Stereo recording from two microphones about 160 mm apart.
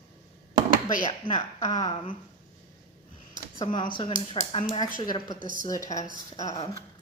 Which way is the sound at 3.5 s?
30° left (ahead or behind).